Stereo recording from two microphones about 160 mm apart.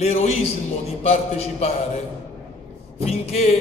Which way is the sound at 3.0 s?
40° left (ahead or behind).